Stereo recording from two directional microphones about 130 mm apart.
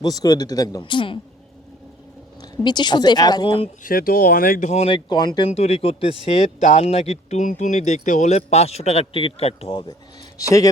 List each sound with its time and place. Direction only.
0.0 s speech: 30° left (ahead or behind)
0.8 s speech: 40° left (ahead or behind)
2.4 s speech: 35° left (ahead or behind)
3.8 s speech: 90° left
4.7 s speech: 45° left (ahead or behind)
5.5 s speech: 55° left (ahead or behind)